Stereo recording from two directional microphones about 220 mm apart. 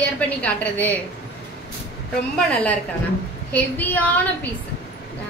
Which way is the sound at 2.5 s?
5° left (ahead or behind).